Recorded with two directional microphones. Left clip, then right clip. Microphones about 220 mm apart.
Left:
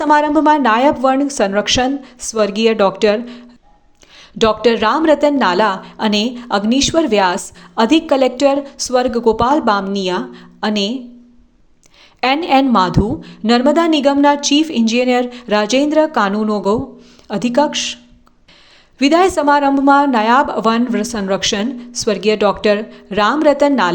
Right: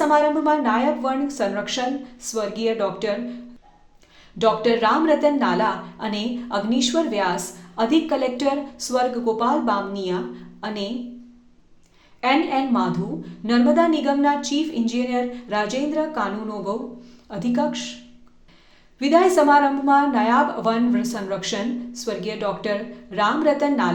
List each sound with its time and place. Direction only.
0.0 s a woman's voice: 40° left (ahead or behind)
12.2 s a woman's voice: 40° left (ahead or behind)
18.9 s a woman's voice: 40° left (ahead or behind)